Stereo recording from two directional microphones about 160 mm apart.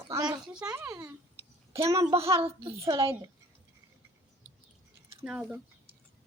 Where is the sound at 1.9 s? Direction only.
20° right (ahead or behind).